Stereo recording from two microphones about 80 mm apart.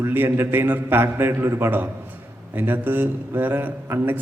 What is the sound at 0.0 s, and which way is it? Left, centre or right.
A man's voice, right.